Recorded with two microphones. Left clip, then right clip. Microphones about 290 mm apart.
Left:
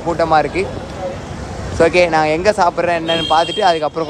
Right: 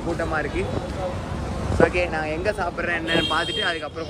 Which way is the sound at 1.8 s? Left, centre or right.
Centre.